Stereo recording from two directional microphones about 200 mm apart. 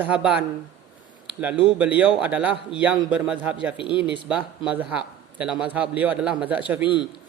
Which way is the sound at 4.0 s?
5° right (ahead or behind).